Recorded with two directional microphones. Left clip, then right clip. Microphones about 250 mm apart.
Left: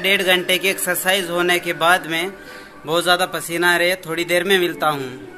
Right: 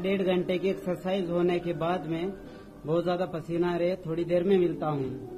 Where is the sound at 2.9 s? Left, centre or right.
Left.